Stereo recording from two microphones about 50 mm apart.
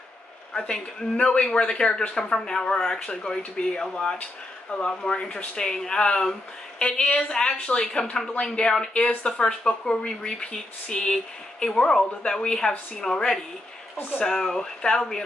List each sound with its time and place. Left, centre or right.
1.1 s a woman's voice: left